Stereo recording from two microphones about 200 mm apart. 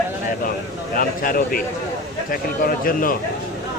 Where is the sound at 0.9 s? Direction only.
45° left (ahead or behind).